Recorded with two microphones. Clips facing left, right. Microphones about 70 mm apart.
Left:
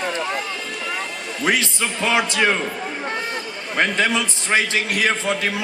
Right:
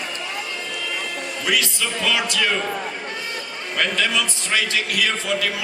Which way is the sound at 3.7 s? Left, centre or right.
Left.